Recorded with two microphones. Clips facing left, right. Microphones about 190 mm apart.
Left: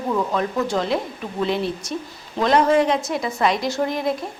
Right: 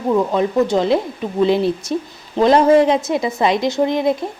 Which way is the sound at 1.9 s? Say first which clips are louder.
Right 7 dB; 30° right (ahead or behind).